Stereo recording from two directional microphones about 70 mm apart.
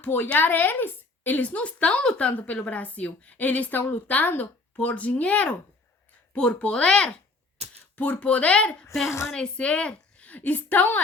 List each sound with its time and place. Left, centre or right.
0.0 s a woman's voice: left